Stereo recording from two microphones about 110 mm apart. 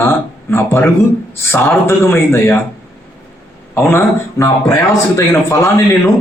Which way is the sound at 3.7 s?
20° left (ahead or behind).